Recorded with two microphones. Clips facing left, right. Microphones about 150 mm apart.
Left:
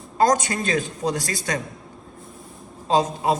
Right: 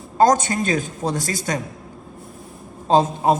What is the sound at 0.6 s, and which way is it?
Speech, 45° right (ahead or behind).